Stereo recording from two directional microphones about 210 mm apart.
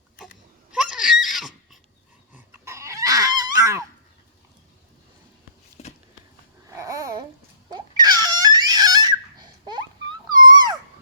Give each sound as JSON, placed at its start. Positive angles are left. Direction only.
{"t": 0.7, "sound": "screaming", "side_deg": -5}
{"t": 2.3, "sound": "a sound", "side_deg": -10}
{"t": 5.8, "sound": "a sound", "side_deg": 30}
{"t": 6.7, "sound": "babbling", "side_deg": -15}
{"t": 7.7, "sound": "crying", "side_deg": -20}
{"t": 10.4, "sound": "dog", "side_deg": -20}